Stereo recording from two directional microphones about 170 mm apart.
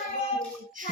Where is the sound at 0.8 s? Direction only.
50° right (ahead or behind).